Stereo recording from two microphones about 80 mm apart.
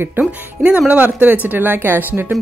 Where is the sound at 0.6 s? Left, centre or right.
Centre.